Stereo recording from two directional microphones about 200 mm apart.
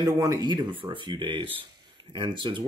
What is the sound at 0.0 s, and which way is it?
Speech, 15° right (ahead or behind).